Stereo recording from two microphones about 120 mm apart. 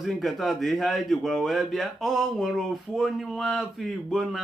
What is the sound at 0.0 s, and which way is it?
Speech, centre (ahead or behind).